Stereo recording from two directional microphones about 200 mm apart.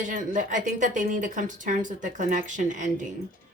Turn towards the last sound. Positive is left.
turn(degrees=-40)  # may be behind; listen again after turning